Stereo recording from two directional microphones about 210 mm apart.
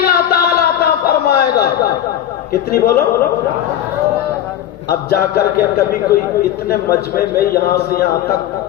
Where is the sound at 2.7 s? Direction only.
45° left (ahead or behind).